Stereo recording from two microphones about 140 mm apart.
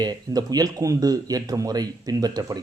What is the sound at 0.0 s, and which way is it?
A man's voice, 30° right (ahead or behind).